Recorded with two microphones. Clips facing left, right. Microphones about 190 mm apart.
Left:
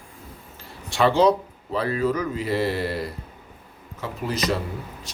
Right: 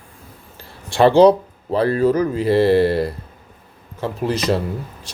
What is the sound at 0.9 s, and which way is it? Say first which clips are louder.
Speech: right 7 dB; 30° right (ahead or behind).